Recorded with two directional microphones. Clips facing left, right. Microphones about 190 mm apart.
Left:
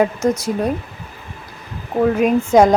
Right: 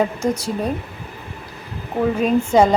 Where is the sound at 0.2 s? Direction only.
10° right (ahead or behind).